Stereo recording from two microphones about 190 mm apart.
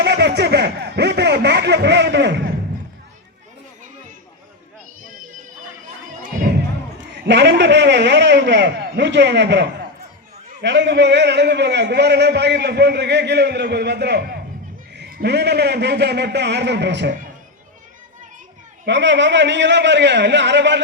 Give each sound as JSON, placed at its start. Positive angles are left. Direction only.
{"t": 0.0, "sound": "a sound", "side_deg": -65}
{"t": 7.3, "sound": "a man's voice", "side_deg": -65}
{"t": 18.9, "sound": "a man's voice", "side_deg": -70}